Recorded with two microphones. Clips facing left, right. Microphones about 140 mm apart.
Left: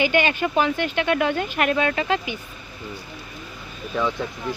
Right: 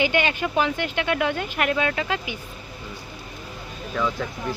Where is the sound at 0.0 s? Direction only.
15° right (ahead or behind).